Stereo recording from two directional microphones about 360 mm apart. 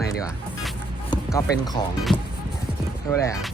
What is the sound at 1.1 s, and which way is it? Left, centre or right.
Speech, centre.